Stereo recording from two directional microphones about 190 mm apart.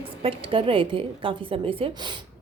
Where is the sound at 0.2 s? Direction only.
30° right (ahead or behind).